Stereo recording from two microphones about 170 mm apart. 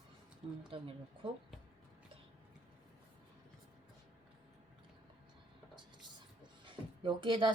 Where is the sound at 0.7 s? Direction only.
30° right (ahead or behind).